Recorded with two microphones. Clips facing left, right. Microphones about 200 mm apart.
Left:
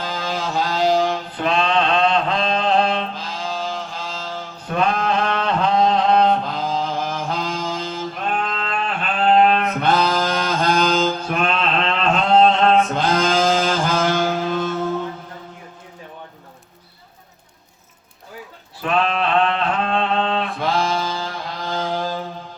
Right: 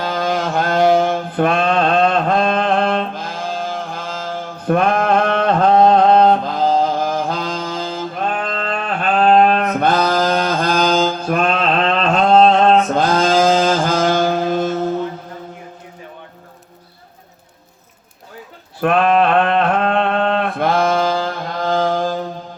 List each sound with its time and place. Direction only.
0.0 s mantra: 55° right (ahead or behind)
10.2 s music: 55° right (ahead or behind)
10.8 s mantra: 40° right (ahead or behind)
13.4 s music: 45° right (ahead or behind)
18.8 s a sound: 55° right (ahead or behind)